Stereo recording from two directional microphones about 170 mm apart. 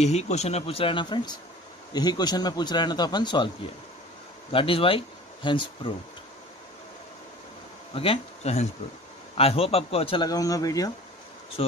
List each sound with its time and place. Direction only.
0.0 s speech: 40° left (ahead or behind)
7.9 s speech: 35° left (ahead or behind)